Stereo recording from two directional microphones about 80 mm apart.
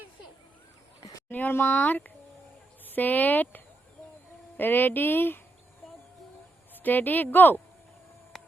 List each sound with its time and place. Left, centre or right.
1.3 s speech: left
6.8 s speech: left
8.3 s a sound: centre